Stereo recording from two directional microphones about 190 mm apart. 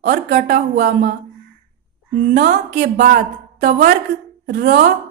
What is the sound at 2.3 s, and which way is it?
A woman's voice, 60° right (ahead or behind).